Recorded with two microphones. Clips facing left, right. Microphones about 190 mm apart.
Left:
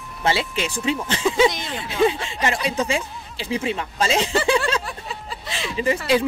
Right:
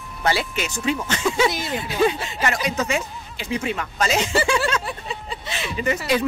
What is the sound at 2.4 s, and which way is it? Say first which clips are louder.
Speech: left 1 dB; 30° left (ahead or behind).